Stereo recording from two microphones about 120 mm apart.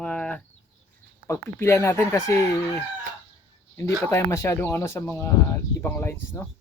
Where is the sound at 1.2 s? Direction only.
25° left (ahead or behind).